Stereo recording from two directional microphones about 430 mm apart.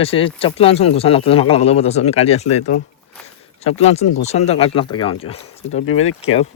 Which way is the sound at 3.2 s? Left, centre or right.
Centre.